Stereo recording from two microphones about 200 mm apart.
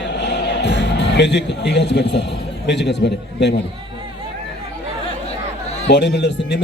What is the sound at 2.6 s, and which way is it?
Speech, 60° left (ahead or behind).